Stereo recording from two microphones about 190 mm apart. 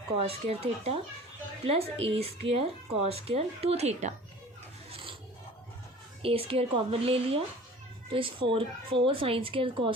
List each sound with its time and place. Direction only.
0.1 s speech: 30° right (ahead or behind)
4.9 s filing: 25° right (ahead or behind)
6.2 s speech: 30° right (ahead or behind)